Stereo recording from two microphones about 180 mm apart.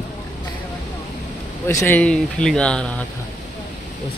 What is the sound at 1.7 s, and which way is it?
Speech, 15° left (ahead or behind).